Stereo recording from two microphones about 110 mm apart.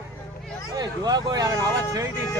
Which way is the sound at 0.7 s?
35° right (ahead or behind).